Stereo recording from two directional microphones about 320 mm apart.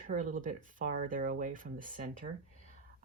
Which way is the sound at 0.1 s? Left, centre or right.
Right.